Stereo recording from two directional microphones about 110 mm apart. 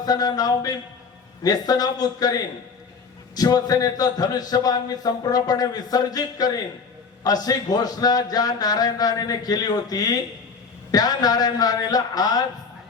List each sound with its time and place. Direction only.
0.0 s a man's voice: 35° left (ahead or behind)